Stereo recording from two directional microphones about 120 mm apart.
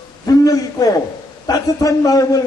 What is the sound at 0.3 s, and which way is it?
A man's voice, 30° left (ahead or behind).